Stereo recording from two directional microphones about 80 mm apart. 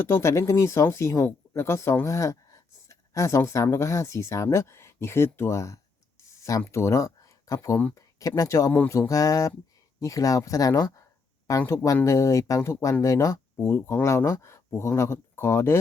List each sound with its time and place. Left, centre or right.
0.0 s speech: left